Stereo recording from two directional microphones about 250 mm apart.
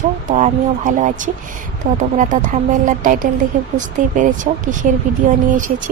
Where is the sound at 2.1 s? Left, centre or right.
Right.